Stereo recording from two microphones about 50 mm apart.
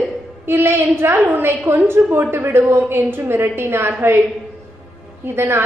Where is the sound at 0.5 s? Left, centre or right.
Right.